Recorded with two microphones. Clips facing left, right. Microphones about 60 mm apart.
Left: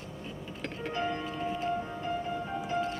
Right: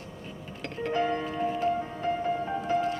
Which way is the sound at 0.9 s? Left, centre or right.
Right.